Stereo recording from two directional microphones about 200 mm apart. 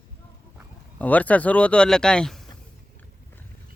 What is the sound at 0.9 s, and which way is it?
Speech, 10° left (ahead or behind).